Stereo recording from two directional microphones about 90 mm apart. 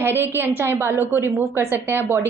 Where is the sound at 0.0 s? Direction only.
25° right (ahead or behind).